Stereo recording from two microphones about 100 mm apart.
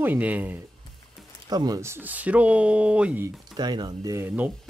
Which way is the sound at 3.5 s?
45° right (ahead or behind).